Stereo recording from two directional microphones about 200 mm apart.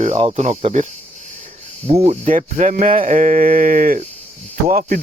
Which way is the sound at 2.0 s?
35° right (ahead or behind).